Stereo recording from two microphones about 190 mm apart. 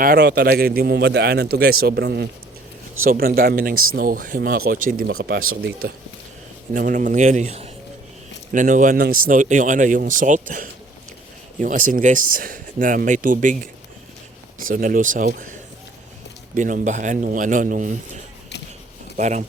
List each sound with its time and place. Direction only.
0.0 s a man's voice: 55° right (ahead or behind)
5.4 s speech: 90° right
6.7 s speech: 45° right (ahead or behind)
14.7 s speech: 45° right (ahead or behind)
16.6 s speech: 45° right (ahead or behind)
19.1 s speech: 40° right (ahead or behind)